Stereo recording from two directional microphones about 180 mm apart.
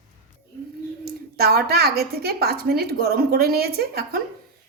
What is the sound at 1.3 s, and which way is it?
A woman's voice, 60° right (ahead or behind).